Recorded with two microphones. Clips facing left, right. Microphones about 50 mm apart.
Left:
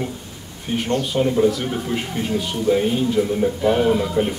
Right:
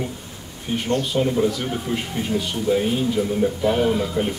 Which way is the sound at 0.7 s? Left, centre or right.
Centre.